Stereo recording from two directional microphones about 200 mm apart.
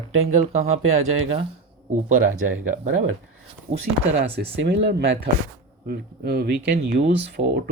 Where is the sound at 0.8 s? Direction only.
90° right.